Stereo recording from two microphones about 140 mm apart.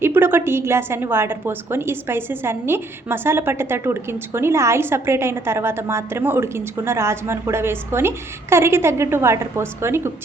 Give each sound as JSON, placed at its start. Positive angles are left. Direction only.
{"t": 0.0, "sound": "a woman's voice", "side_deg": -15}